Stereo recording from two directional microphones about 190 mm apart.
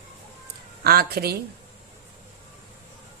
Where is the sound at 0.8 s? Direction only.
55° right (ahead or behind).